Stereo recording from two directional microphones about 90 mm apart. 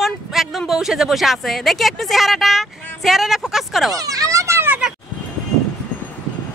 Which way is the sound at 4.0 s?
40° right (ahead or behind).